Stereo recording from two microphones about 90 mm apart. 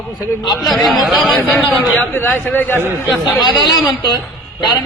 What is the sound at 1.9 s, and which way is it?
Speech, 25° left (ahead or behind).